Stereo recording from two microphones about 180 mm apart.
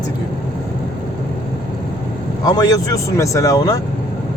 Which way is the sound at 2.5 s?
20° left (ahead or behind).